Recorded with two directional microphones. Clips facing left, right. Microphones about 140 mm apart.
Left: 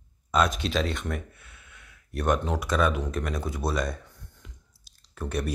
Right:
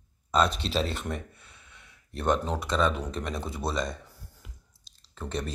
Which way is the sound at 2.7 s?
5° left (ahead or behind).